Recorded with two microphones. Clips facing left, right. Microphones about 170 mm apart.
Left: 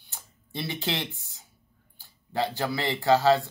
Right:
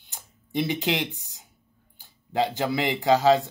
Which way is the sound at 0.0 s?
15° right (ahead or behind).